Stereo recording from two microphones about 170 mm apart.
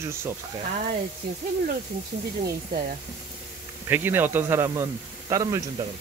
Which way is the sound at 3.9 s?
10° right (ahead or behind).